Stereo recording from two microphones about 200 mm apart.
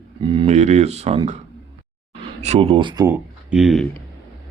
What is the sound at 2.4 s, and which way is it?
Speech, 30° right (ahead or behind).